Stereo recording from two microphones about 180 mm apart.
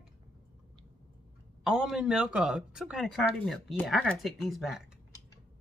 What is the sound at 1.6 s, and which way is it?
Speech, 5° right (ahead or behind).